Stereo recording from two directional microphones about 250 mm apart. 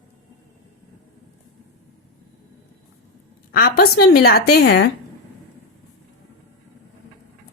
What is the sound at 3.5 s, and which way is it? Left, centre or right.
A woman's voice, left.